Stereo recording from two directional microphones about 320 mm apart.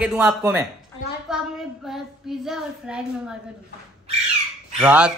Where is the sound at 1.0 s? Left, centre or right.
Left.